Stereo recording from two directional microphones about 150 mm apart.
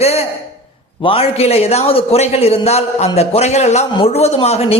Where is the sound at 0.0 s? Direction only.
45° left (ahead or behind).